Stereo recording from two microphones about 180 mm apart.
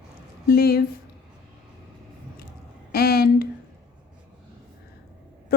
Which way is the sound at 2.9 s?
60° left (ahead or behind).